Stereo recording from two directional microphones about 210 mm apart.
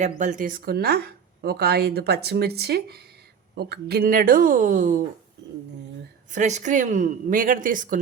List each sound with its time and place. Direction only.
0.0 s speech: 35° right (ahead or behind)
6.3 s a woman's voice: 35° right (ahead or behind)